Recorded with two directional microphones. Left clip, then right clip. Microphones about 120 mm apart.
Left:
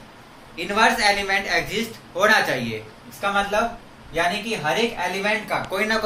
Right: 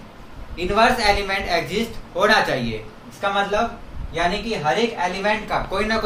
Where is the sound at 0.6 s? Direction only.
20° right (ahead or behind).